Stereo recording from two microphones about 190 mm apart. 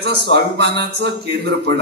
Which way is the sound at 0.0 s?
60° right (ahead or behind).